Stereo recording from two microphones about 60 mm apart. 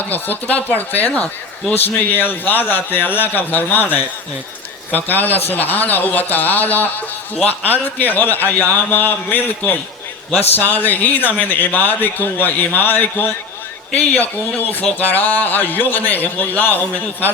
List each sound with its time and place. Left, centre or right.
0.1 s a man's voice: left